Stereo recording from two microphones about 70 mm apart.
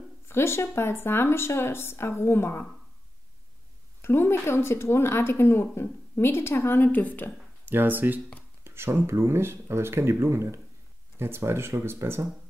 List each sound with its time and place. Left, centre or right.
0.3 s speech: left
4.0 s speech: left
7.6 s speech: right